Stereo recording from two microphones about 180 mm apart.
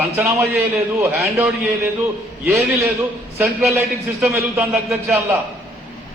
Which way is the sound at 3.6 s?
5° right (ahead or behind).